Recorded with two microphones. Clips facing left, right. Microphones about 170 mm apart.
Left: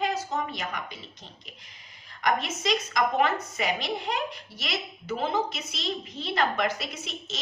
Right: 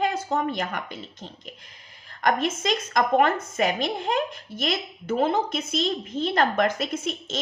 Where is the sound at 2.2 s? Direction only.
50° right (ahead or behind).